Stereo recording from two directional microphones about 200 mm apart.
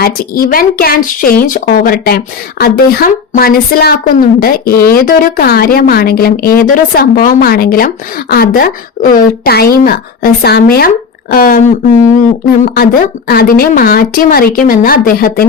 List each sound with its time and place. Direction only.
0.0 s speech: 45° left (ahead or behind)
12.6 s speech: 45° left (ahead or behind)